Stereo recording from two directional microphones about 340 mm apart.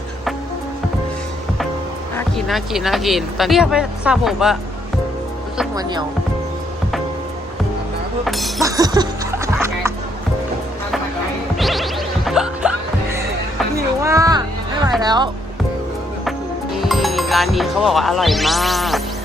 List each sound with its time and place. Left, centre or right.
2.1 s speech: centre
5.5 s speech: centre
8.2 s speech: centre
8.7 s music: centre
11.5 s music: centre
14.0 s music: centre
15.0 s speech: centre
16.7 s music: centre